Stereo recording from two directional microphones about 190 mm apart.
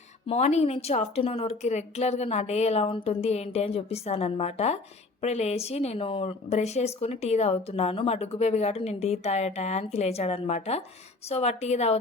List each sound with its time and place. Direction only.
0.3 s speech: 35° left (ahead or behind)